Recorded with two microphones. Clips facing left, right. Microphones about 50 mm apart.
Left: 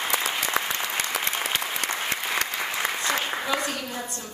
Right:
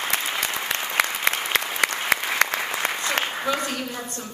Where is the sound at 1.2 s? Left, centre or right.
Right.